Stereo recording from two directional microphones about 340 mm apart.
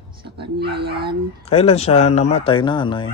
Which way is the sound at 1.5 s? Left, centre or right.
Centre.